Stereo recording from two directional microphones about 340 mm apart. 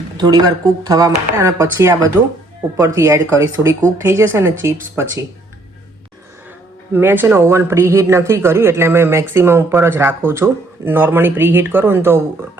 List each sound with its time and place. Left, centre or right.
0.2 s speech: centre
6.9 s speech: centre